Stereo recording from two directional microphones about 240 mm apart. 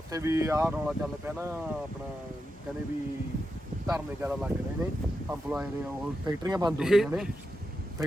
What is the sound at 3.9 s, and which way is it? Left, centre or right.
Speech, centre.